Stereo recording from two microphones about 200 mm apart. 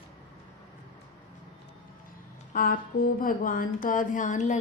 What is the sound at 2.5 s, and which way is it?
Speech, 45° left (ahead or behind).